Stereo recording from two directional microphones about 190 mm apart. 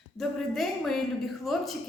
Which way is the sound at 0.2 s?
Centre (ahead or behind).